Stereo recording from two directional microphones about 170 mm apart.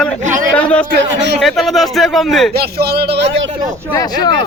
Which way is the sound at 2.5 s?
70° right (ahead or behind).